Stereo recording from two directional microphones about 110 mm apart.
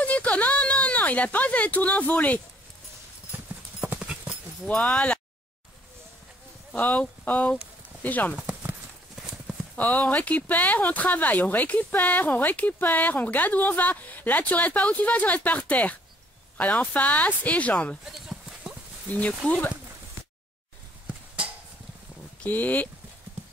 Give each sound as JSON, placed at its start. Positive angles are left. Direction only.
{"t": 0.0, "sound": "speech", "side_deg": 15}
{"t": 3.8, "sound": "clip-clop", "side_deg": -10}
{"t": 4.6, "sound": "speech", "side_deg": 10}
{"t": 6.7, "sound": "speech", "side_deg": 15}
{"t": 8.4, "sound": "a sound", "side_deg": -10}
{"t": 9.8, "sound": "speech", "side_deg": 15}
{"t": 18.0, "sound": "clip-clop", "side_deg": 0}
{"t": 19.4, "sound": "speech", "side_deg": 15}
{"t": 22.4, "sound": "speech", "side_deg": 15}